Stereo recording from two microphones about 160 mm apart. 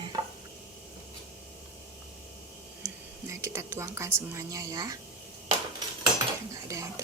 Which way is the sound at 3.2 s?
20° right (ahead or behind).